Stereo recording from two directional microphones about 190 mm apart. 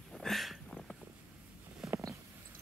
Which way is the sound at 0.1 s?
Centre (ahead or behind).